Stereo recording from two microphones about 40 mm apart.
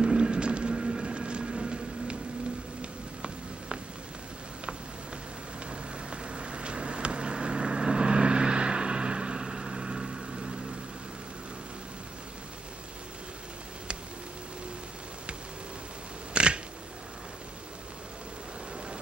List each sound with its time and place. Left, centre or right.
0.0 s a sound: right
5.7 s vehicle: right
16.3 s camera: right